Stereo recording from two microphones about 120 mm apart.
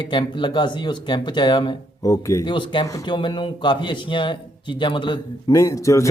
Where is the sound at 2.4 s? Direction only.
40° left (ahead or behind).